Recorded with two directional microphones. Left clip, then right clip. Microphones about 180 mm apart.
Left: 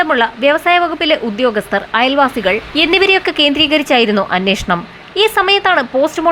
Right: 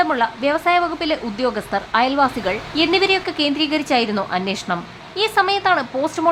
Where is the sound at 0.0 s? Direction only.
15° left (ahead or behind).